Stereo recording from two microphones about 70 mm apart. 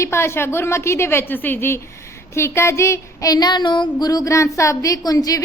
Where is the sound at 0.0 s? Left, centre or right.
Left.